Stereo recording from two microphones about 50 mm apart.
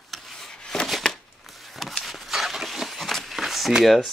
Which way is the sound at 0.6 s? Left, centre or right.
Centre.